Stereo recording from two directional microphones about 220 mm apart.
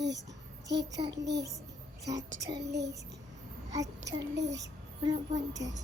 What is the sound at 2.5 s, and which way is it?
Child singing, 50° right (ahead or behind).